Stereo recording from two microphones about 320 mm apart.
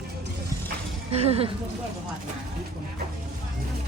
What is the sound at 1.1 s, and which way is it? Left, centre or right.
Speech, centre.